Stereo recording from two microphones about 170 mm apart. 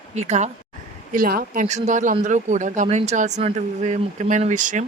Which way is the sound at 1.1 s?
55° right (ahead or behind).